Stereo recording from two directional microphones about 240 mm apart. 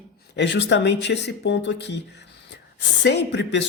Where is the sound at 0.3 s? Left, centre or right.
Left.